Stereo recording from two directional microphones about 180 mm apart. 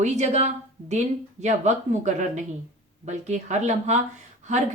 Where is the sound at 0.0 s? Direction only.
40° right (ahead or behind).